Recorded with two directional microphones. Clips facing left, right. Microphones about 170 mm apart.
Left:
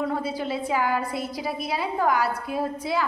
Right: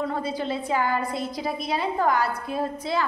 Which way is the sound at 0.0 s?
5° left (ahead or behind).